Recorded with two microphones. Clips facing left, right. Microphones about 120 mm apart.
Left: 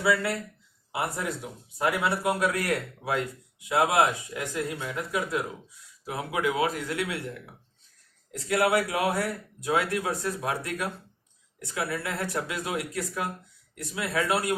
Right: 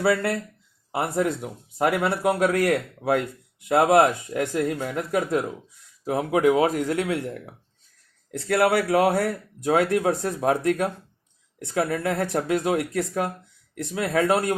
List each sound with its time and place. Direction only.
0.0 s speech: 55° right (ahead or behind)
8.3 s speech: 60° right (ahead or behind)